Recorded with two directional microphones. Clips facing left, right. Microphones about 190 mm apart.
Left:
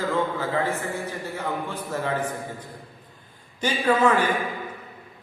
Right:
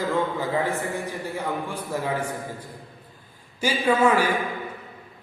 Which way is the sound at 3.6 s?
10° right (ahead or behind).